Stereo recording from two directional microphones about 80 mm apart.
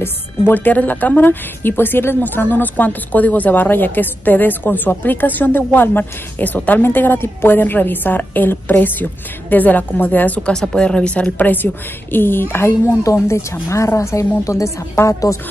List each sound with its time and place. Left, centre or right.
0.0 s speech: left
10.5 s a woman's voice: centre; by 15.3 s left